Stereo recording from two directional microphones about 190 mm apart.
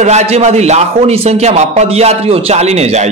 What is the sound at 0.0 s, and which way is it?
A man's voice, 35° right (ahead or behind).